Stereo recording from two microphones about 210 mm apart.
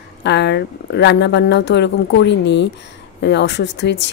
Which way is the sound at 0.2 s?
55° left (ahead or behind).